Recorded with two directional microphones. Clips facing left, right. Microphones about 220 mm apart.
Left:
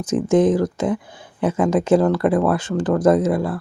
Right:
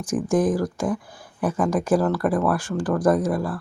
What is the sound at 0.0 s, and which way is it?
Speech, 20° left (ahead or behind).